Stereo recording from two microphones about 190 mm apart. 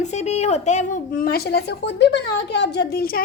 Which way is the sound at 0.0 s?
35° left (ahead or behind).